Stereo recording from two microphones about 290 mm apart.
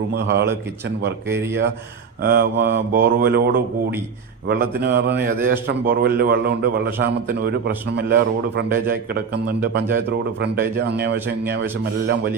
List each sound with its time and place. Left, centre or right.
0.1 s a man's voice: right
1.3 s speech: centre
2.2 s a man's voice: right